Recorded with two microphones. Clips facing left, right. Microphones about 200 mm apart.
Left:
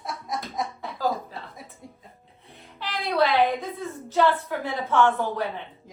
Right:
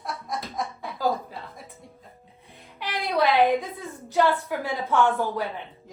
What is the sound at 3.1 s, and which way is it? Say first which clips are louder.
A woman's voice: right 1 dB; 15° right (ahead or behind).